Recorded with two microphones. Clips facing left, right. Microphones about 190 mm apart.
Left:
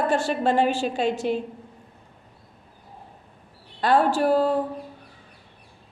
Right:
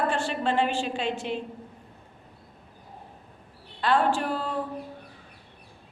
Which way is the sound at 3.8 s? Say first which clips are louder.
Left 4 dB; 40° left (ahead or behind).